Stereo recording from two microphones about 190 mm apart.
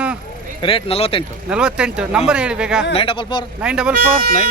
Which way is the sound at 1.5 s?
5° right (ahead or behind).